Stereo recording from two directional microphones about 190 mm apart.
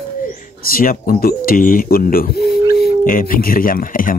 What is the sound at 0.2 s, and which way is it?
Speech, 50° left (ahead or behind).